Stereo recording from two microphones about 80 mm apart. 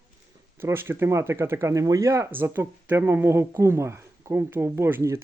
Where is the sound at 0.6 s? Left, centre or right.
Right.